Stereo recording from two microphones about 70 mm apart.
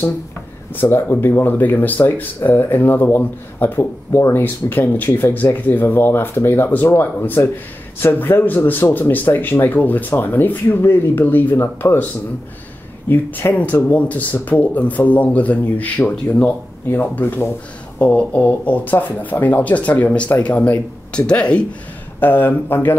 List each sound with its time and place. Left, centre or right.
0.7 s speech: left
13.1 s speech: left
22.2 s speech: left